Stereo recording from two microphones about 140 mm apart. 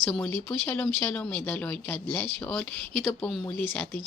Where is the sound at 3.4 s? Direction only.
15° left (ahead or behind).